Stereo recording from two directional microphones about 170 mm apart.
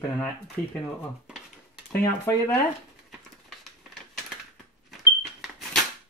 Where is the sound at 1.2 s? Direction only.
5° right (ahead or behind).